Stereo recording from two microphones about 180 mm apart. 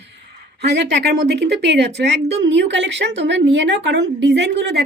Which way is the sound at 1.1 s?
70° right (ahead or behind).